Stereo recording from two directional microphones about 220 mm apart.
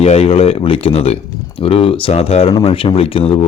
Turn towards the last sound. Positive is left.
turn(degrees=25)  # may be behind; listen again after turning